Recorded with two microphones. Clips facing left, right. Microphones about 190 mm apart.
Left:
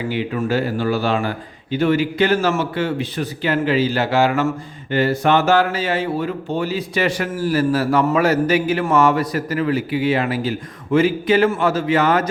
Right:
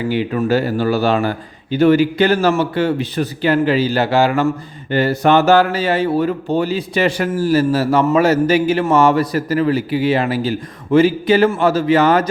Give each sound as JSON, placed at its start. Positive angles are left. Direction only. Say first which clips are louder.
{"t": 0.1, "sound": "speech", "louder": "right 5 dB", "side_deg": -40}